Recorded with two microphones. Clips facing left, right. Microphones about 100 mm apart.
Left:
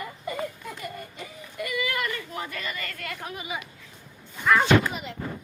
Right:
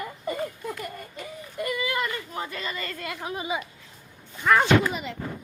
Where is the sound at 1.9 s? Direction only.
25° right (ahead or behind).